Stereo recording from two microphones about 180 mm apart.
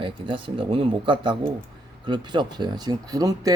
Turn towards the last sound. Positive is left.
turn(degrees=-20)  # may be behind; listen again after turning